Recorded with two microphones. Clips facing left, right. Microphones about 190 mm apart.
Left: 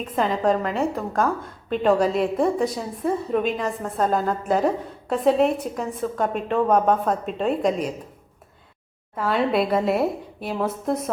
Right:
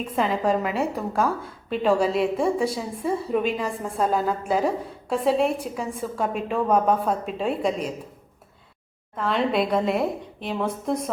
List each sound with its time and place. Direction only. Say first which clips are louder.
0.2 s a woman's voice: left 2 dB; 5° right (ahead or behind)
9.1 s a woman's voice: left 2 dB; 5° left (ahead or behind)